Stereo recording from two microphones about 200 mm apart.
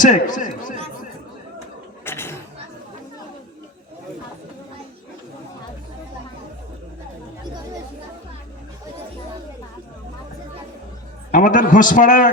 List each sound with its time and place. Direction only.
0.0 s a man's voice: 40° left (ahead or behind)
2.0 s a sound: 10° left (ahead or behind)
11.3 s a man's voice: 40° left (ahead or behind)